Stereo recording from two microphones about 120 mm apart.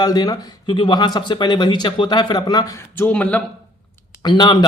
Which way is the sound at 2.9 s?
15° left (ahead or behind).